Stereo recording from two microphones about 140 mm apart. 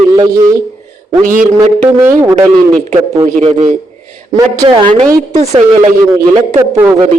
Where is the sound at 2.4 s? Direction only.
55° right (ahead or behind).